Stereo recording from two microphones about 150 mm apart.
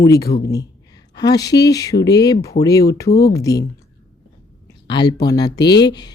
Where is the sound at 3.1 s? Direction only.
90° left.